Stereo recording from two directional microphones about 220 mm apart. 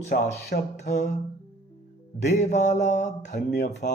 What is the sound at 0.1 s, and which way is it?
Speech, 35° left (ahead or behind).